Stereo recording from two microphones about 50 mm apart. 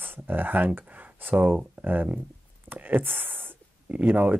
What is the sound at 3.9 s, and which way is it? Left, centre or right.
Speech, right.